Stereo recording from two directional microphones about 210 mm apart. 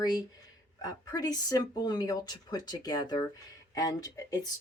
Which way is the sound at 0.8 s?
20° left (ahead or behind).